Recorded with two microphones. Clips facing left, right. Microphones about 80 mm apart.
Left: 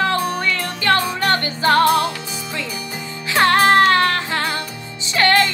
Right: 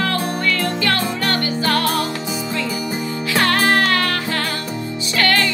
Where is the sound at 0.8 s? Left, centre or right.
Left.